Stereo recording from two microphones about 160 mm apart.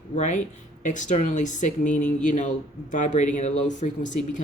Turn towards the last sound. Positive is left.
turn(degrees=50)  # may be behind; listen again after turning